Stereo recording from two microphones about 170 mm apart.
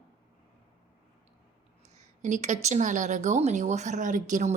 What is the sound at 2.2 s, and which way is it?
A woman's voice, 45° right (ahead or behind).